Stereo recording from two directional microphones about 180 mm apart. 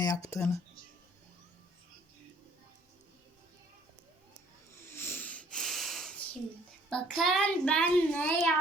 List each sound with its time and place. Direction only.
0.0 s speech: 20° left (ahead or behind)
4.8 s wheeze: 10° left (ahead or behind)
6.9 s a child's voice: centre (ahead or behind)